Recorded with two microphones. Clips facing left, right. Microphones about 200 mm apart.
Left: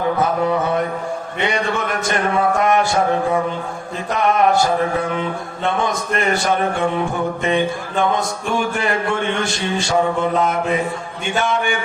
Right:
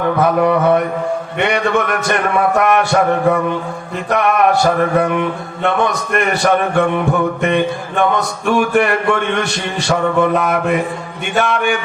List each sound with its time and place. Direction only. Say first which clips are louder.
0.2 s mantra: right 5 dB; 65° right (ahead or behind)